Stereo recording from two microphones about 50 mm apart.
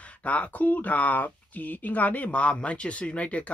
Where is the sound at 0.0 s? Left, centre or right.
Left.